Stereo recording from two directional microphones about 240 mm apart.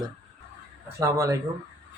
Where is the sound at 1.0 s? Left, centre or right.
Centre.